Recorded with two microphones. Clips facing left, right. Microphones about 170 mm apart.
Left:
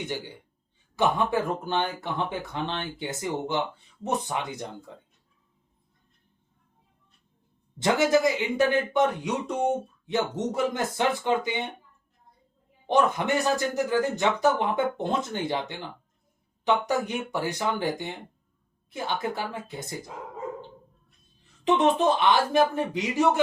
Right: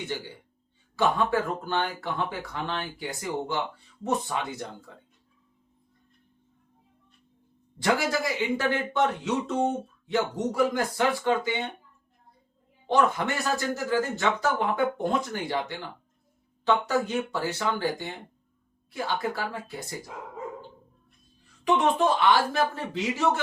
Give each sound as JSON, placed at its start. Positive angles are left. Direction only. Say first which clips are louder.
{"t": 0.9, "sound": "speech", "louder": "even", "side_deg": 20}
{"t": 7.8, "sound": "speech", "louder": "left 4 dB", "side_deg": 20}
{"t": 12.9, "sound": "speech", "louder": "left 1 dB", "side_deg": 20}
{"t": 21.6, "sound": "speech", "louder": "left 1 dB", "side_deg": 20}